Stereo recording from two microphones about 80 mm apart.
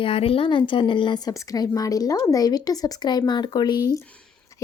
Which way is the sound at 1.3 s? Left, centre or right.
Left.